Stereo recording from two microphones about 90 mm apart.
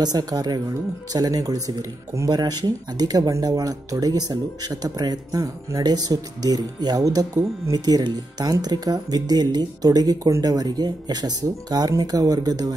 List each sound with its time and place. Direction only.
0.0 s speech: 50° right (ahead or behind)